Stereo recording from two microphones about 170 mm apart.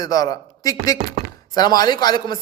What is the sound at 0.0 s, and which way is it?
Speech, 20° left (ahead or behind).